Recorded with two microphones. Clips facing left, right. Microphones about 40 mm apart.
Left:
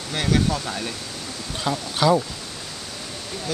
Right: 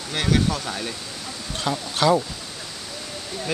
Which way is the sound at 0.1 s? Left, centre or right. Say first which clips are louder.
Even; centre.